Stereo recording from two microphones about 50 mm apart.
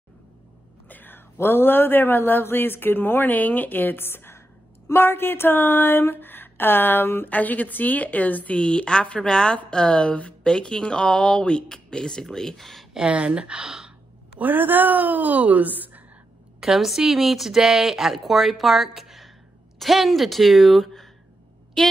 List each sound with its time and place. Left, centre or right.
0.8 s speech: left
7.2 s a woman's voice: left
8.5 s a woman's voice: centre
12.9 s speech: right
14.4 s a woman's voice: right
16.5 s speech: centre